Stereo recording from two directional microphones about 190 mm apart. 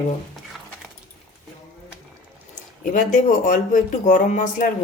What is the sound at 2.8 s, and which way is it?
Speech, 45° left (ahead or behind).